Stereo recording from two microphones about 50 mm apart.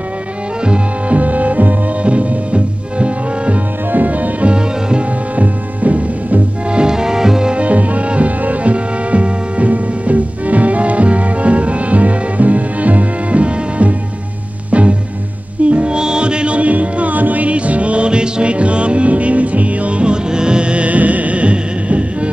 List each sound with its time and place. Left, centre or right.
0.7 s music: right
5.3 s music: right
7.6 s music: right